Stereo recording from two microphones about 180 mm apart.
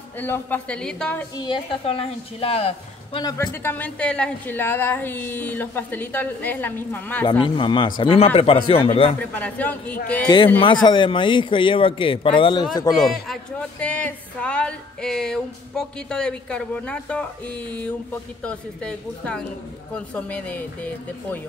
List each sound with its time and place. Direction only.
0.2 s a woman's voice: 10° left (ahead or behind)
1.3 s speech: 25° left (ahead or behind)
3.3 s a woman's voice: 10° left (ahead or behind)
7.2 s speech: 25° left (ahead or behind)
9.2 s a woman's voice: 10° left (ahead or behind)
10.2 s speech: 25° left (ahead or behind)
13.0 s a woman's voice: centre (ahead or behind)